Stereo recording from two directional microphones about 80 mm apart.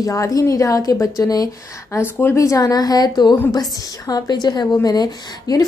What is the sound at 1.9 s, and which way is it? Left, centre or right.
A woman's voice, left.